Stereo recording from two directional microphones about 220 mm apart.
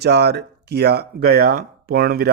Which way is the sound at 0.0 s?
50° right (ahead or behind).